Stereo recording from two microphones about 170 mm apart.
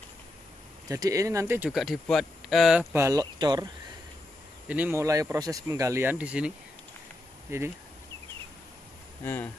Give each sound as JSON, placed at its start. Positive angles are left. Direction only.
{"t": 0.8, "sound": "speech", "side_deg": -20}
{"t": 1.7, "sound": "speech", "side_deg": 0}
{"t": 2.9, "sound": "speech", "side_deg": -15}
{"t": 4.6, "sound": "speech", "side_deg": -10}
{"t": 9.2, "sound": "speech", "side_deg": 15}